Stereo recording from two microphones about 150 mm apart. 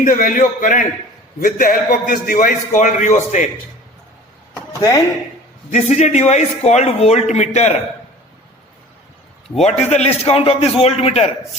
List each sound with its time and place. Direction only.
0.0 s a man's voice: 60° left (ahead or behind)
5.7 s a man's voice: 50° left (ahead or behind)
9.6 s a man's voice: 50° left (ahead or behind)